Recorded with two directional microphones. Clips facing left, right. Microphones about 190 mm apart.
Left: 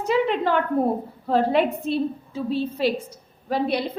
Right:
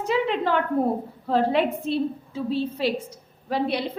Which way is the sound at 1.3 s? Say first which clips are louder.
Left 1 dB; 45° left (ahead or behind).